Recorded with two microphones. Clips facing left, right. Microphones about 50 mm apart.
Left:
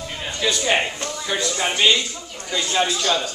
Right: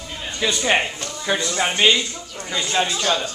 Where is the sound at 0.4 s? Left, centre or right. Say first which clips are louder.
Right 1 dB; centre.